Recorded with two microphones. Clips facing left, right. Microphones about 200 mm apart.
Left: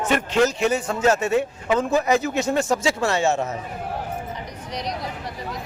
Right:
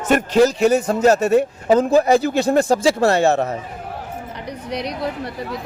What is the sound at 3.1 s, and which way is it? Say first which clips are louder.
Speech: right 4 dB; 60° right (ahead or behind).